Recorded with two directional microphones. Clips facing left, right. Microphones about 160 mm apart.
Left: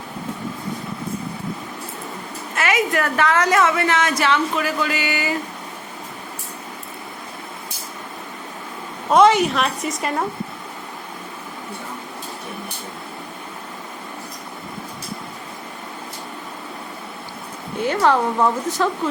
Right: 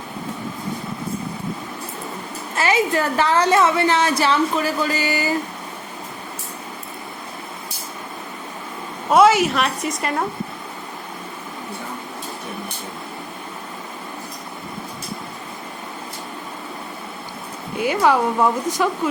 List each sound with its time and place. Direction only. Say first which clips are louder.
2.6 s a woman's voice: right 1 dB; 30° right (ahead or behind)
9.0 s a woman's voice: even; 5° right (ahead or behind)
17.7 s speech: even; 10° right (ahead or behind)